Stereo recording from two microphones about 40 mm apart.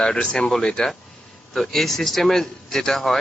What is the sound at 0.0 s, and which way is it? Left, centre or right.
Speech, left.